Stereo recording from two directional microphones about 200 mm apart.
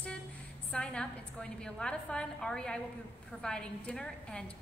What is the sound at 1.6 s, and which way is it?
A woman's voice, 5° left (ahead or behind).